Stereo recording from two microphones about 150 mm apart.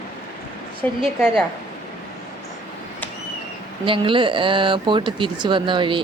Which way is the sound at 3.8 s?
35° right (ahead or behind).